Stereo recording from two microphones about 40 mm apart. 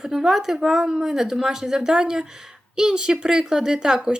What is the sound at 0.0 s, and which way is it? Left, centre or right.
Speech, centre.